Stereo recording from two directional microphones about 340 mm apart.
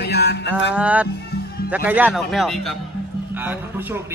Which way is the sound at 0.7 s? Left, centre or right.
Centre.